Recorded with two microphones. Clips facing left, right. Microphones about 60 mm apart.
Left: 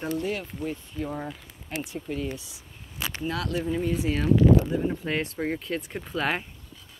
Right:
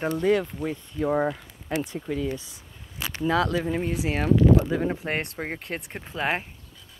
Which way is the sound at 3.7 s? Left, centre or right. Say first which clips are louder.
Even; right.